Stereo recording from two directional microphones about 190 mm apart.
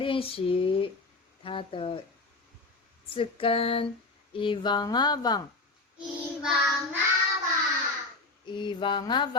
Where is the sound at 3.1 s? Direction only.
30° left (ahead or behind).